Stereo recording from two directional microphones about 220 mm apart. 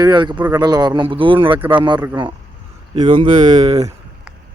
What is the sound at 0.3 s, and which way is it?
Speech, 10° right (ahead or behind).